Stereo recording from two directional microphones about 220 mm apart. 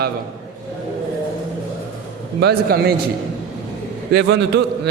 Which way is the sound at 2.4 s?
45° right (ahead or behind).